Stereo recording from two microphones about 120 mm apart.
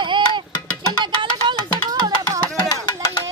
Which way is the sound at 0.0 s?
40° right (ahead or behind).